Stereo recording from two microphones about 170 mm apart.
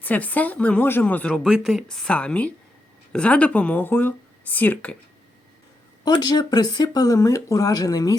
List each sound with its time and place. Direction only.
0.0 s speech: 10° left (ahead or behind)
1.5 s speech: 5° right (ahead or behind)
6.1 s speech: 25° left (ahead or behind)